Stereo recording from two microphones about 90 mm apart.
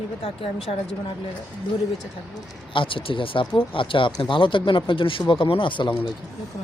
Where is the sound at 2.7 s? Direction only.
70° left (ahead or behind).